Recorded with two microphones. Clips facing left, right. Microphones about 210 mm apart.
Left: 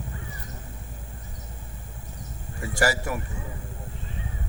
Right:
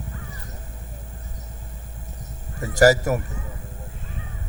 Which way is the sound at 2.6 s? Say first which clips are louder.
Right 9 dB; 40° right (ahead or behind).